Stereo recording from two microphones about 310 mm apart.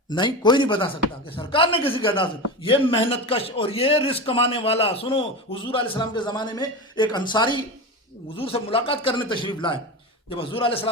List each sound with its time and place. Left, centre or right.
0.1 s a man's voice: centre